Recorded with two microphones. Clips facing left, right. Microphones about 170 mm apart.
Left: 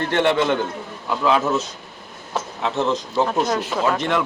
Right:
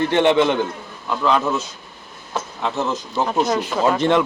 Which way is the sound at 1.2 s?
5° left (ahead or behind).